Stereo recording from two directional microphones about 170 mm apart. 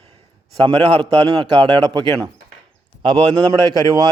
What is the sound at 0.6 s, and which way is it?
A man's voice, 35° right (ahead or behind).